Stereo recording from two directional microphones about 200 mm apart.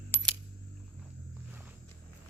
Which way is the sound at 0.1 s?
10° left (ahead or behind).